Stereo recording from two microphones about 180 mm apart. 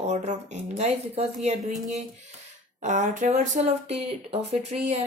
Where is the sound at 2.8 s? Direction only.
45° right (ahead or behind).